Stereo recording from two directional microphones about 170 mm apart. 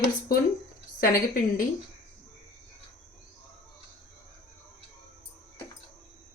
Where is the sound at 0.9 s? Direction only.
55° left (ahead or behind).